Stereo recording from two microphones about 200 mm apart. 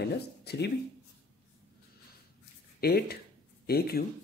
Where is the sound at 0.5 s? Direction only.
55° left (ahead or behind).